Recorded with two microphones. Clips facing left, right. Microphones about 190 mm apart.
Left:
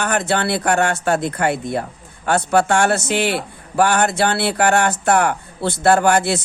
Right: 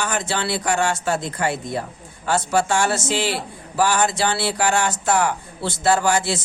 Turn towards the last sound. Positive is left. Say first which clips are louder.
# left 4 dB
turn(degrees=60)  # may be behind; listen again after turning